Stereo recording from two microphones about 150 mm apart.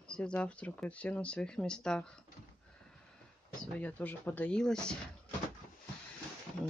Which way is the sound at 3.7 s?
10° left (ahead or behind).